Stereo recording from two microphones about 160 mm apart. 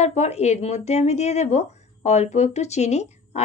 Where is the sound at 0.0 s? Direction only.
45° left (ahead or behind).